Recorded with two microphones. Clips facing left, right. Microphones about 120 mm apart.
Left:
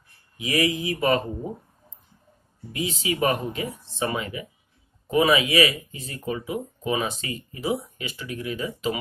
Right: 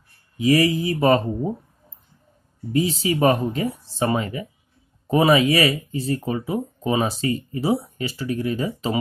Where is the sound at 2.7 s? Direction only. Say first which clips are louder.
Right 7 dB; 35° right (ahead or behind).